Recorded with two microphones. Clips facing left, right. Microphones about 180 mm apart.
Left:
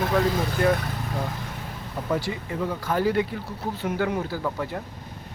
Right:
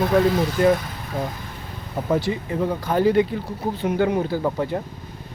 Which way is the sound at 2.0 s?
25° right (ahead or behind).